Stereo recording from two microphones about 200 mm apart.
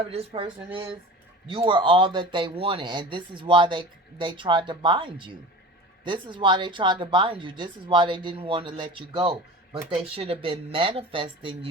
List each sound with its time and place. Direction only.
0.1 s speech: 30° right (ahead or behind)